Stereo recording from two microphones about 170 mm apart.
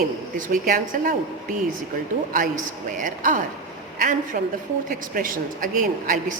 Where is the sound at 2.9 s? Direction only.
50° right (ahead or behind).